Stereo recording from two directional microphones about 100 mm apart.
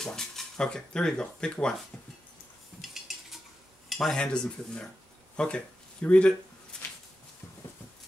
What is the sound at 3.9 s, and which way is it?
Stir, 5° left (ahead or behind).